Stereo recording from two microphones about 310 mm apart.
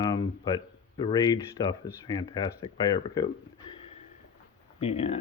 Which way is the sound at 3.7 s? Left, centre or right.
Centre.